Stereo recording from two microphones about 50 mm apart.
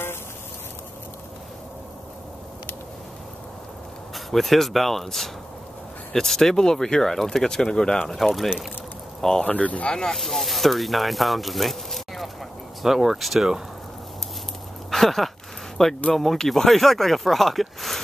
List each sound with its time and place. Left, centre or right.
4.1 s speech: centre
9.4 s speech: left
9.9 s speech: centre
14.9 s a sound: centre
16.1 s speech: centre